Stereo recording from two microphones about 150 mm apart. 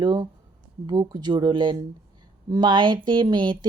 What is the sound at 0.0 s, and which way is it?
Speech, 30° right (ahead or behind).